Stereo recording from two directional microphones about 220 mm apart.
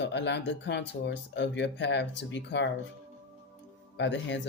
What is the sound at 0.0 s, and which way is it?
Speech, 50° left (ahead or behind).